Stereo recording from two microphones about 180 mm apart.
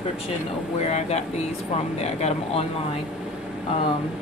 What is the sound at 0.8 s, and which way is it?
Speech, 35° left (ahead or behind).